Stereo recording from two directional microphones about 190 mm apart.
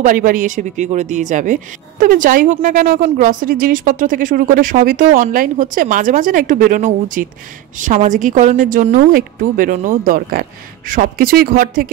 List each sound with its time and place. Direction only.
0.0 s speech: 45° right (ahead or behind)